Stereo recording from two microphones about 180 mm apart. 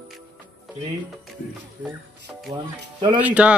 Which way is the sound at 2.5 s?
25° right (ahead or behind).